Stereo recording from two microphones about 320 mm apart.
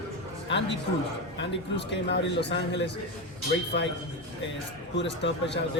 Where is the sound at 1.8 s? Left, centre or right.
Left.